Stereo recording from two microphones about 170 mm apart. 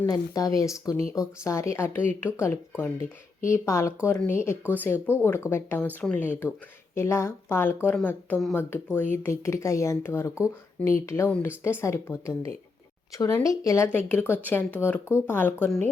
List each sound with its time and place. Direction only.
0.1 s speech: 20° left (ahead or behind)